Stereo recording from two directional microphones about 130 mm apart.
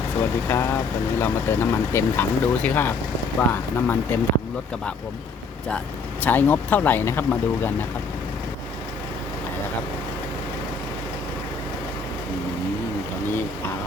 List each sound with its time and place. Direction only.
0.2 s speech: 15° left (ahead or behind)
6.2 s speech: 15° left (ahead or behind)